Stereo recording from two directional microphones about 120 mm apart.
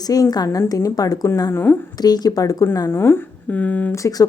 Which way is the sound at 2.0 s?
35° left (ahead or behind).